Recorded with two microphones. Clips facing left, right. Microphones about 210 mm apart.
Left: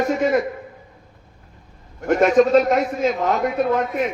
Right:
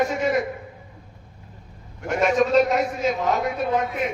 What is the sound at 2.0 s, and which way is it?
A man's voice, 50° left (ahead or behind).